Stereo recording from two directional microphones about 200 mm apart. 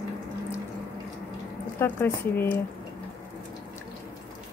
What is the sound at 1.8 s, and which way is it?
Speech, 10° left (ahead or behind).